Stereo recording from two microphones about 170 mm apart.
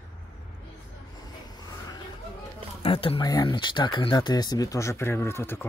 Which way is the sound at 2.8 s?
30° left (ahead or behind).